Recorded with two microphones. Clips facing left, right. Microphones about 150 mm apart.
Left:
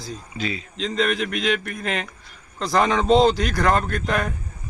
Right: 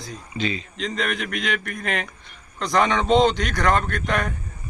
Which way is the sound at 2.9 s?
5° left (ahead or behind).